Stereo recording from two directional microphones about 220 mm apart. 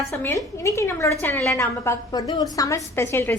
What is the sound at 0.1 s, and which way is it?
A woman's voice, 10° left (ahead or behind).